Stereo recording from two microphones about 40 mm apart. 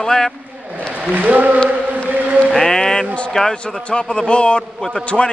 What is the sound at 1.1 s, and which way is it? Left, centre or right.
Speech, right.